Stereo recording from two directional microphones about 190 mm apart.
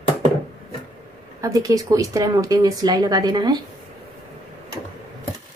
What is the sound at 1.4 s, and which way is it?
A woman's voice, 20° right (ahead or behind).